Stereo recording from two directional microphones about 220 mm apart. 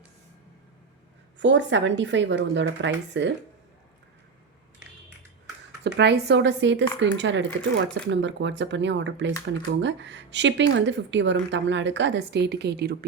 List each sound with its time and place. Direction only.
1.4 s speech: 55° right (ahead or behind)
5.8 s speech: 50° right (ahead or behind)